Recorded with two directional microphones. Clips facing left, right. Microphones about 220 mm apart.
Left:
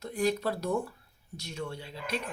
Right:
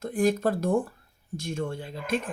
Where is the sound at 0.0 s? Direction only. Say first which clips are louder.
Right 5 dB; 50° right (ahead or behind).